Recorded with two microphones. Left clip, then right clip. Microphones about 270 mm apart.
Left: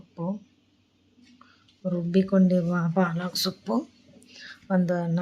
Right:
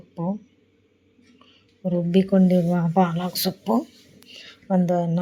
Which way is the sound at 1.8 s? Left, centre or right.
Centre.